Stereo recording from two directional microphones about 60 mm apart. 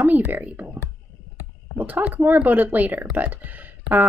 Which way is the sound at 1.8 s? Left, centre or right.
Right.